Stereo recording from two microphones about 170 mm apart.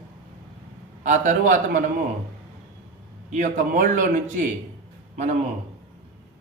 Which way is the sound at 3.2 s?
45° right (ahead or behind).